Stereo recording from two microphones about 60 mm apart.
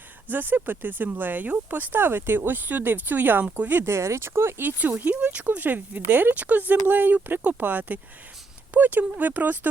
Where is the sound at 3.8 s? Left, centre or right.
Right.